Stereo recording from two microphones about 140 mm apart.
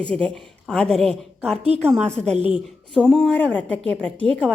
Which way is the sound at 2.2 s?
50° right (ahead or behind).